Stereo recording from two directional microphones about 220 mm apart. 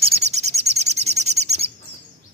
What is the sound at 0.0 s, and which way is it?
Bird, 30° right (ahead or behind).